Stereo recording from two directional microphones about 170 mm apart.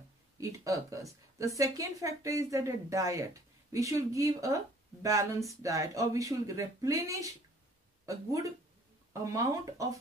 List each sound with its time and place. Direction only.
0.4 s a woman's voice: 20° right (ahead or behind)